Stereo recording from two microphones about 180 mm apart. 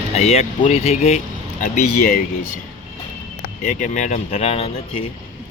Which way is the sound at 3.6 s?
45° left (ahead or behind).